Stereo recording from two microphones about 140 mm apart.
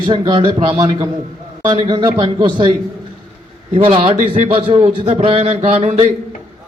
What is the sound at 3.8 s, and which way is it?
A man's voice, 40° right (ahead or behind).